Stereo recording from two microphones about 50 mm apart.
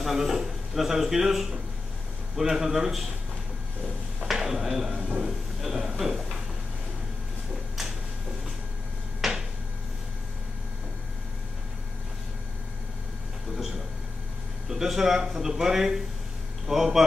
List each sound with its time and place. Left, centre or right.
0.0 s a man's voice: centre
4.3 s speech: centre
5.0 s speech: centre
5.6 s a sound: centre
9.2 s a sound: centre
14.7 s a man's voice: centre